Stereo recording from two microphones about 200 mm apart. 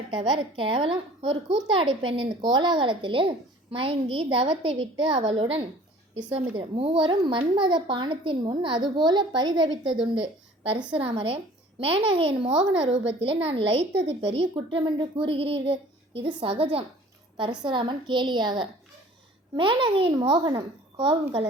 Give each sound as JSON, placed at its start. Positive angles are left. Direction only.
{"t": 0.1, "sound": "a woman's voice", "side_deg": -25}